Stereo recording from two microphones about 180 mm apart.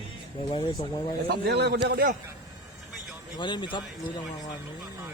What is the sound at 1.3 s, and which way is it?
Speech, 65° right (ahead or behind).